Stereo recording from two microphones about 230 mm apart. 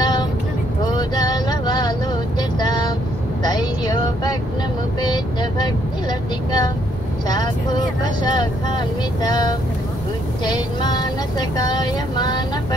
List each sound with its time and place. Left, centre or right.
0.0 s vehicle: centre
0.8 s a sound: centre
2.6 s vehicle: centre
10.4 s music: centre